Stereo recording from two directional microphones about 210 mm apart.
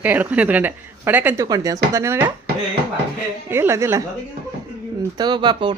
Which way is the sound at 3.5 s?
10° right (ahead or behind).